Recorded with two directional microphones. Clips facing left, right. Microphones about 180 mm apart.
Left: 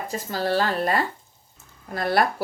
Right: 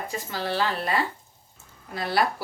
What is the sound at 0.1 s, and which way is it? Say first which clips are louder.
Speech: left 7 dB; 40° left (ahead or behind).